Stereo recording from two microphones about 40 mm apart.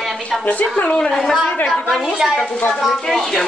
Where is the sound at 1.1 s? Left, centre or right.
Centre.